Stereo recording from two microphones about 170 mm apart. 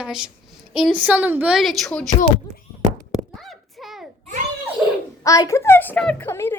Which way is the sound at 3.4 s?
Centre (ahead or behind).